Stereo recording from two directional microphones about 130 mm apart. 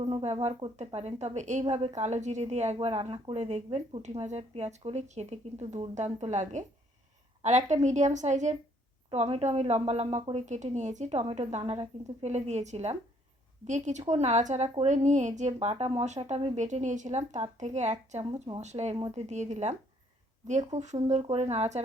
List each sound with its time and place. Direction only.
0.0 s a woman's voice: 50° right (ahead or behind)
9.1 s a woman's voice: 55° right (ahead or behind)
13.7 s a woman's voice: 65° right (ahead or behind)
15.6 s a woman's voice: 55° right (ahead or behind)
20.7 s a woman's voice: 60° right (ahead or behind)